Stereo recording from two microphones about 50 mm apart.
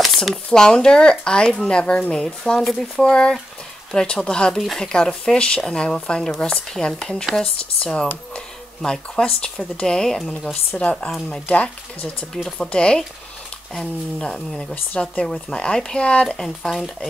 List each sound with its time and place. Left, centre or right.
0.0 s a sound: centre
0.3 s speech: centre
10.1 s speech: centre
10.8 s speech: left
12.4 s speech: centre
14.2 s speech: centre
14.7 s speech: left
16.3 s speech: centre